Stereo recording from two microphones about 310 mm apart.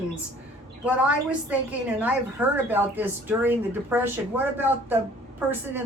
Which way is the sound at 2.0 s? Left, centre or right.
Centre.